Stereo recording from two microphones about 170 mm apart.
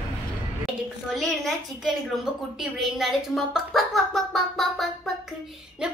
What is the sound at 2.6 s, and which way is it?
A woman's voice, centre (ahead or behind).